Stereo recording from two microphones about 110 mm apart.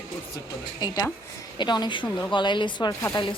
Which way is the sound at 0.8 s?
35° left (ahead or behind).